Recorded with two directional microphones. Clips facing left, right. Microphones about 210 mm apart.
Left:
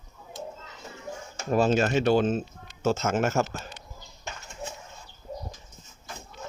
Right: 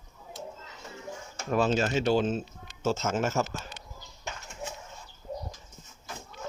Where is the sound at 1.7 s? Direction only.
55° left (ahead or behind).